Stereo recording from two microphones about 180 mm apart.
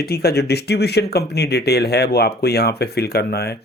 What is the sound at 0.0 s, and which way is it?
Speech, 60° left (ahead or behind).